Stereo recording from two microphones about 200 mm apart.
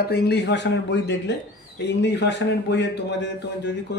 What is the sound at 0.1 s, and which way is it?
A man's voice, 55° left (ahead or behind).